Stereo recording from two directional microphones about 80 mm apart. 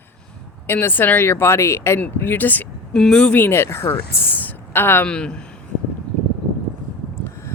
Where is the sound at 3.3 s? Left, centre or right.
Left.